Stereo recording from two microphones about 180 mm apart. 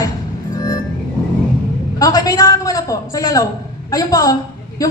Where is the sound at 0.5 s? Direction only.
20° left (ahead or behind).